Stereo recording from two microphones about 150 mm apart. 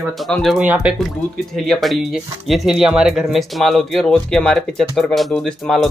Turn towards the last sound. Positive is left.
turn(degrees=5)  # may be behind; listen again after turning